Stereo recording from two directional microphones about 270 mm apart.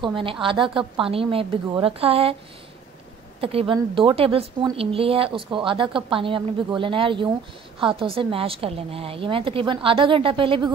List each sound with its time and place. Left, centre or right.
0.0 s a woman's voice: centre
3.3 s a woman's voice: right